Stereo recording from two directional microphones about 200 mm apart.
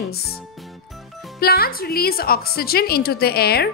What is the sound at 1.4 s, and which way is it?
A woman's voice, 50° left (ahead or behind).